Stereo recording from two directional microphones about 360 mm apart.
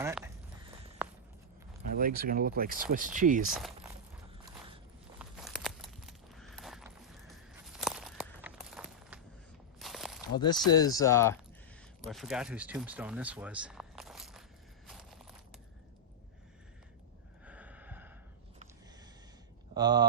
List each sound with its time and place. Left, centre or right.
0.0 s speech: centre
1.0 s walk: centre
2.0 s speech: right
5.2 s a sound: centre
10.3 s speech: centre
14.8 s a sound: centre
17.4 s snort: centre
19.7 s speech: centre